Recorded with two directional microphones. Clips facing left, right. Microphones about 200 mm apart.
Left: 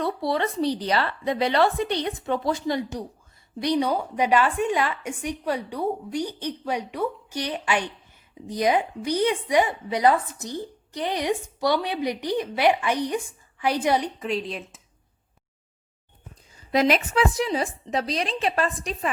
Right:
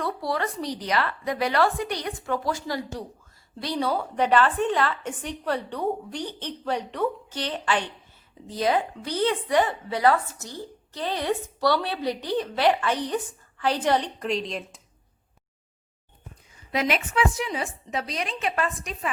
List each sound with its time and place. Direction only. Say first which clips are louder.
0.0 s a woman's voice: left 3 dB; 25° left (ahead or behind); by 14.8 s 5° left (ahead or behind)
16.7 s a woman's voice: left 4 dB; 35° left (ahead or behind)